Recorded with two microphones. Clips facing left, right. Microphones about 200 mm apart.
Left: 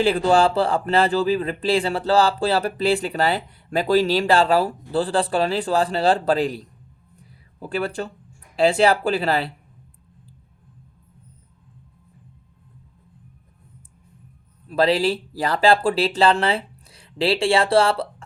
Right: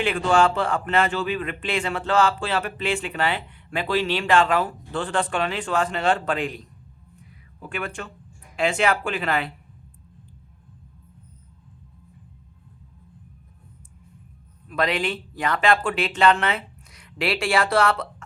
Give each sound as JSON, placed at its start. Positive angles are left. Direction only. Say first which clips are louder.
{"t": 0.0, "sound": "speech", "louder": "left 3 dB", "side_deg": 35}
{"t": 7.2, "sound": "a sound", "louder": "left 5 dB", "side_deg": 35}
{"t": 8.5, "sound": "speech", "louder": "left 5 dB", "side_deg": 35}
{"t": 14.7, "sound": "speech", "louder": "left 6 dB", "side_deg": 30}